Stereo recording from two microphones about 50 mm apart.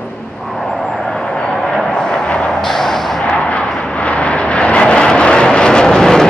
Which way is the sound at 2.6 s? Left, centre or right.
Centre.